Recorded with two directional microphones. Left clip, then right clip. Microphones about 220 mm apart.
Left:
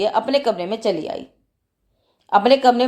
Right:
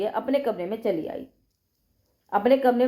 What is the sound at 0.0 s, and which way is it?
A woman's voice, 35° left (ahead or behind).